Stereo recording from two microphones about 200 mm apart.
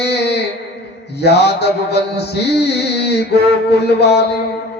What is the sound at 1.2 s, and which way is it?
Music, 55° left (ahead or behind).